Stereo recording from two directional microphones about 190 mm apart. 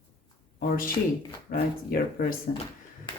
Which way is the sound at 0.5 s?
50° left (ahead or behind).